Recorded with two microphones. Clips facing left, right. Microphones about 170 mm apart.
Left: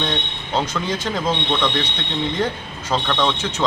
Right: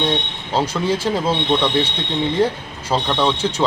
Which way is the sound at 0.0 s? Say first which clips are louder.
Right 4 dB; 10° right (ahead or behind).